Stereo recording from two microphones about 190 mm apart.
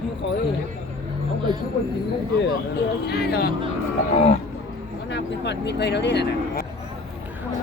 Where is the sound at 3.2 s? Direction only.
55° left (ahead or behind).